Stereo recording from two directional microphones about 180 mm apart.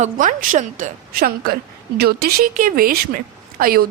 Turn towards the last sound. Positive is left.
turn(degrees=-55)  # may be behind; listen again after turning